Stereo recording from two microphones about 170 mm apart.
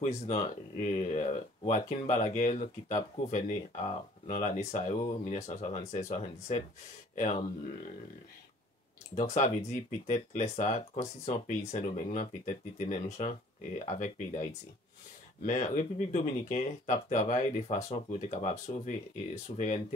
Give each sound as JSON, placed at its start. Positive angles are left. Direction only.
{"t": 0.3, "sound": "speech", "side_deg": 45}
{"t": 9.1, "sound": "speech", "side_deg": 45}